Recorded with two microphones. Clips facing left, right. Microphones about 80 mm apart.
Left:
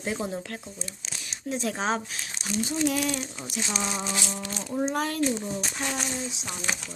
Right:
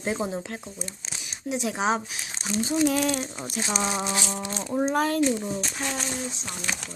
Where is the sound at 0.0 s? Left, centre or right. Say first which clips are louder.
Right 2 dB; right.